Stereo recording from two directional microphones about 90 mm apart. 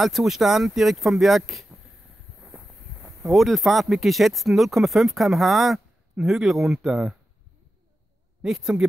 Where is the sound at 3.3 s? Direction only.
Centre (ahead or behind).